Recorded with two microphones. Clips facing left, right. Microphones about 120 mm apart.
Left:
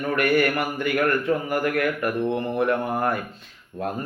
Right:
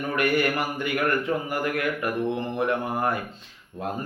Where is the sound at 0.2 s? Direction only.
20° right (ahead or behind).